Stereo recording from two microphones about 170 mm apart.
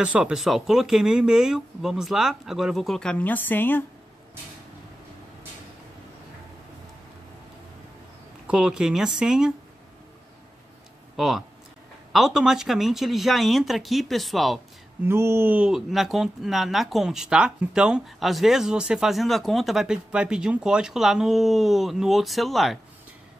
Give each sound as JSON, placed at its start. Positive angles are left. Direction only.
{"t": 0.0, "sound": "speech", "side_deg": -5}
{"t": 8.5, "sound": "speech", "side_deg": -5}
{"t": 11.1, "sound": "speech", "side_deg": 0}
{"t": 15.0, "sound": "speech", "side_deg": -15}